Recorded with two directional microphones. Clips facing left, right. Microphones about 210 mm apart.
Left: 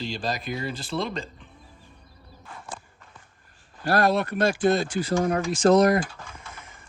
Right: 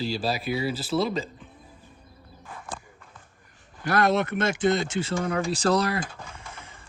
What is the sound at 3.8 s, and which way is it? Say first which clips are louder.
Speech: left 1 dB; 20° right (ahead or behind).